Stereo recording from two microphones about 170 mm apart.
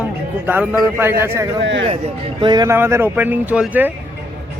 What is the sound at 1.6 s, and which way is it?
Speech, 90° right.